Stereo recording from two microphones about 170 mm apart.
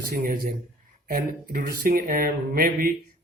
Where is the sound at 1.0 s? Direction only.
60° right (ahead or behind).